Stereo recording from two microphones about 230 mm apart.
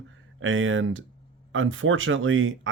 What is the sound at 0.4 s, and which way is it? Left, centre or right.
Speech, right.